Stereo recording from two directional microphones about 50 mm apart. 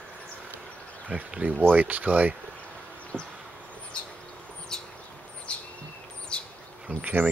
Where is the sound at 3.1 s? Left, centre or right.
Left.